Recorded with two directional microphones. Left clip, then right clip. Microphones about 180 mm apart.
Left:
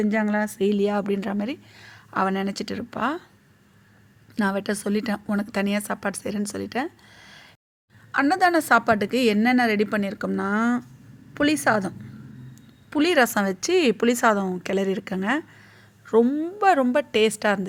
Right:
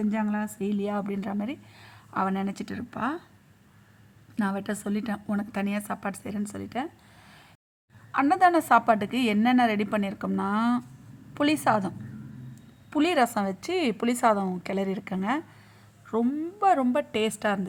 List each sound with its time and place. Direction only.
0.0 s a woman's voice: 20° left (ahead or behind)
4.4 s a woman's voice: 15° left (ahead or behind)